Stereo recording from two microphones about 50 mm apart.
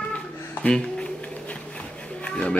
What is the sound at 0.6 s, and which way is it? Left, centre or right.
Speech, left.